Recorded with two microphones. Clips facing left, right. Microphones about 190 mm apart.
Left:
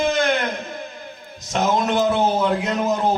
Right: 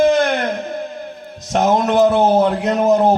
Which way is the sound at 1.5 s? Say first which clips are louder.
Right 5 dB; 65° right (ahead or behind).